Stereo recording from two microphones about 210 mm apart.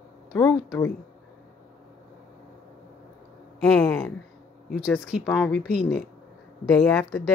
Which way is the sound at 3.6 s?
5° left (ahead or behind).